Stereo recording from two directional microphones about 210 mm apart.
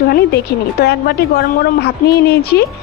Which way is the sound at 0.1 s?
50° left (ahead or behind).